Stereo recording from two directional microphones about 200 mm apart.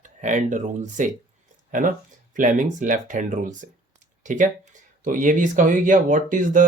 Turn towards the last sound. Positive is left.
turn(degrees=-40)  # may be behind; listen again after turning